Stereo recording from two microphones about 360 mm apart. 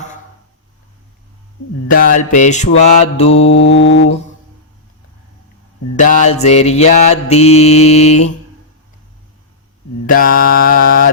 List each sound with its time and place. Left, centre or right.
1.9 s mantra: left
3.5 s mantra: left
6.0 s mantra: left
10.1 s mantra: left